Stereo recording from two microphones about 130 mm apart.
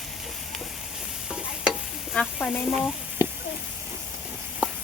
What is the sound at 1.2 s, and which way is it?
Stir, 5° right (ahead or behind).